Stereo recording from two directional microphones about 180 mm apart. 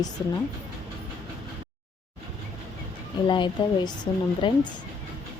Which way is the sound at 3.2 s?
25° left (ahead or behind).